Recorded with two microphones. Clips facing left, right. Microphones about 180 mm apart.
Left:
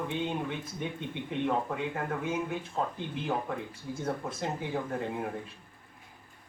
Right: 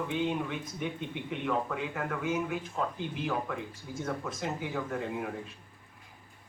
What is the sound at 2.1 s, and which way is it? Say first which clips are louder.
Speech: even; 30° left (ahead or behind).